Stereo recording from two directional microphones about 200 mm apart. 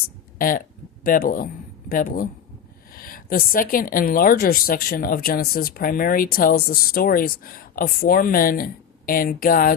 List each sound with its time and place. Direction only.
0.3 s speech: 45° left (ahead or behind)